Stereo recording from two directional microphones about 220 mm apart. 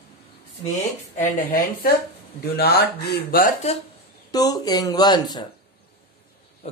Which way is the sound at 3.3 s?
35° left (ahead or behind).